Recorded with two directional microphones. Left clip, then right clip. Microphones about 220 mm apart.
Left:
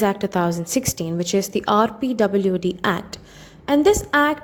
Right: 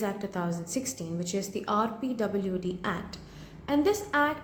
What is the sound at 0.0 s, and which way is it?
A woman's voice, 40° left (ahead or behind).